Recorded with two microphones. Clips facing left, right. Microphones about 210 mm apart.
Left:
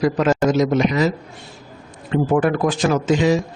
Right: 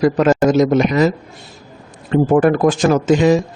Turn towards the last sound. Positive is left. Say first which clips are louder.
# right 4 dB
turn(degrees=-50)  # may be behind; listen again after turning